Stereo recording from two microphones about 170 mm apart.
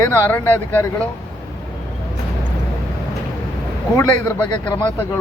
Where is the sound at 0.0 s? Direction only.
15° left (ahead or behind).